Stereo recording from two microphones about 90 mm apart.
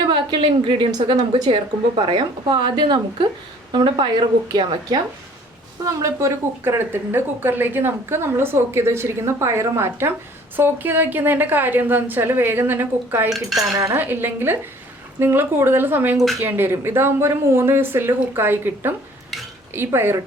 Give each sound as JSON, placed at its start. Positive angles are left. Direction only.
{"t": 0.0, "sound": "a woman's voice", "side_deg": -60}
{"t": 0.9, "sound": "speech", "side_deg": -45}
{"t": 1.5, "sound": "speech", "side_deg": -80}
{"t": 2.5, "sound": "a woman's voice", "side_deg": -55}
{"t": 5.8, "sound": "a woman's voice", "side_deg": -35}
{"t": 13.3, "sound": "cutlery", "side_deg": 0}
{"t": 13.9, "sound": "a woman's voice", "side_deg": -25}